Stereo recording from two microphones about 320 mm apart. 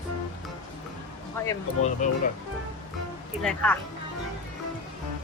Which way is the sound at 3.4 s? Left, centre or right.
Centre.